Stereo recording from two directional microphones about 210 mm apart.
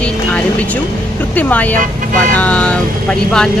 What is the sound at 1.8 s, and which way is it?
Speech, 40° right (ahead or behind).